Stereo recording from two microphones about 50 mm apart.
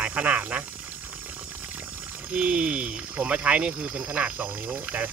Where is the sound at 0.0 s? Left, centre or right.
Right.